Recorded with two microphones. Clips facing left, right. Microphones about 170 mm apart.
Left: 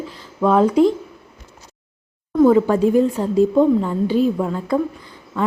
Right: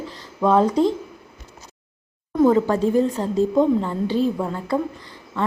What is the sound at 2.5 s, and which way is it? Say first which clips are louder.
A woman's voice: left 3 dB; 10° left (ahead or behind).